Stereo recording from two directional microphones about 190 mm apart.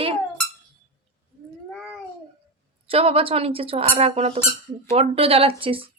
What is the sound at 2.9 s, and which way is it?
A woman's voice, 30° right (ahead or behind).